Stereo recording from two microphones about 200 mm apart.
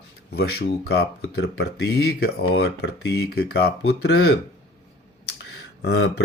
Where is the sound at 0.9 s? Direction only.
55° left (ahead or behind).